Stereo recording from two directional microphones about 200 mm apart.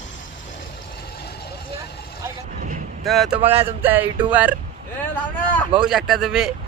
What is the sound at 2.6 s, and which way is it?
Vehicle, 40° right (ahead or behind).